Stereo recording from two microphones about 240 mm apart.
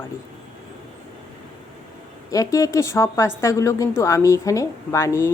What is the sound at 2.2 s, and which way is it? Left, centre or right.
A woman's voice, centre.